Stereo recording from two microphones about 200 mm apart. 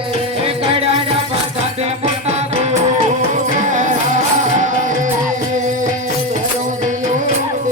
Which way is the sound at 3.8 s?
40° right (ahead or behind).